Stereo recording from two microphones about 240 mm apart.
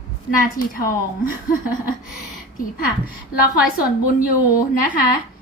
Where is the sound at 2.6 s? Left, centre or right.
Left.